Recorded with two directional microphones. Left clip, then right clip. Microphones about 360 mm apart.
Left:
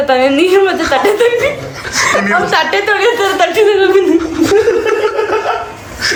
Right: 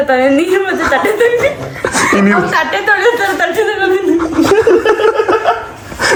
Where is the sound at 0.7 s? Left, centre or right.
Centre.